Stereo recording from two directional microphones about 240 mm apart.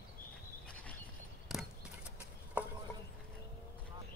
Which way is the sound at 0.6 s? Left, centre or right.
Centre.